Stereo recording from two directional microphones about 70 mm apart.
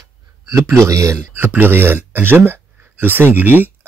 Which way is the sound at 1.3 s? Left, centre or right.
Right.